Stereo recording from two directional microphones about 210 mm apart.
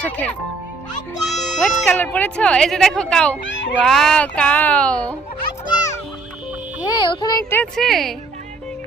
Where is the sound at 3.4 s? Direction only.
60° left (ahead or behind).